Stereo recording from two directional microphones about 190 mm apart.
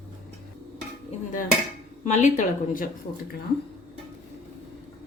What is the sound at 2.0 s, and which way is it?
Speech, 40° left (ahead or behind).